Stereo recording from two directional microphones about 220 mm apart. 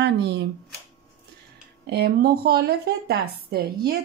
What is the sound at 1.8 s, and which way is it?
Speech, 50° right (ahead or behind).